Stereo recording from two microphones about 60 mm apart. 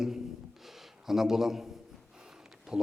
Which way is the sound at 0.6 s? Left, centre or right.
Centre.